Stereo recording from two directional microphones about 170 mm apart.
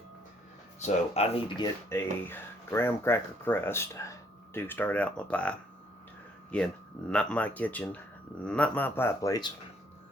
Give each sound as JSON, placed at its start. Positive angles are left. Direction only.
{"t": 0.8, "sound": "speech", "side_deg": 40}
{"t": 1.5, "sound": "speech", "side_deg": 20}